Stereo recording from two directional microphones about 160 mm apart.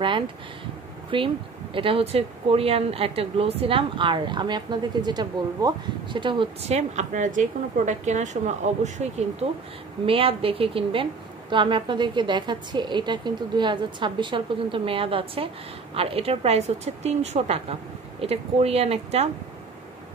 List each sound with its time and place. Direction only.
1.1 s a woman's voice: 35° right (ahead or behind)
6.7 s a woman's voice: 45° right (ahead or behind)